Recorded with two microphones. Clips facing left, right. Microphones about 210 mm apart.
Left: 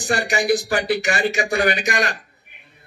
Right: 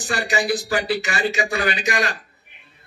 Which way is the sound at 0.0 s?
45° left (ahead or behind).